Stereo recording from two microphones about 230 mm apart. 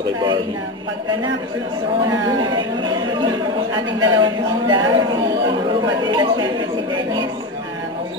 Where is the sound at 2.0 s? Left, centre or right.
Centre.